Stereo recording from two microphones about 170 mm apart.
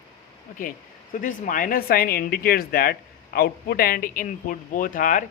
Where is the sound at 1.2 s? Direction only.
55° left (ahead or behind).